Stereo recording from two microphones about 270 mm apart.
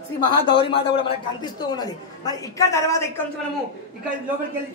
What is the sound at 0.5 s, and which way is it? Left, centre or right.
A man's voice, centre.